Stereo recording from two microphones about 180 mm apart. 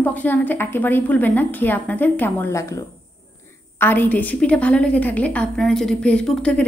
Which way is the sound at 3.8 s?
10° left (ahead or behind).